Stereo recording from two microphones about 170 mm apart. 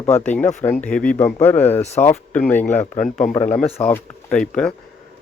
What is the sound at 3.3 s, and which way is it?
Speech, 35° left (ahead or behind).